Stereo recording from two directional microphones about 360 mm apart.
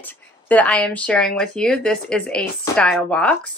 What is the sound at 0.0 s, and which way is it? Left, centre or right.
Speech, centre.